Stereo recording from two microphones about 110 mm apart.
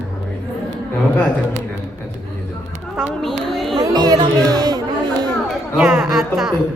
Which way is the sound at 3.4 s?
Centre (ahead or behind).